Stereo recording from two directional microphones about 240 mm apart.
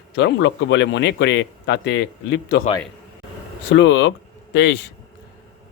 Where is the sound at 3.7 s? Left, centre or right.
Left.